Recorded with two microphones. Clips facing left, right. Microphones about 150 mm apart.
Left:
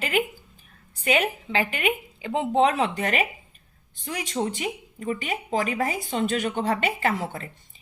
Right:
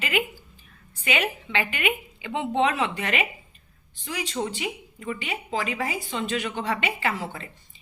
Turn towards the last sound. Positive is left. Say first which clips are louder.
# left 3 dB
turn(degrees=50)  # may be behind; listen again after turning